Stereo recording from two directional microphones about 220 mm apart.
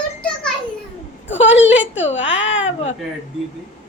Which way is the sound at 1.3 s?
55° left (ahead or behind).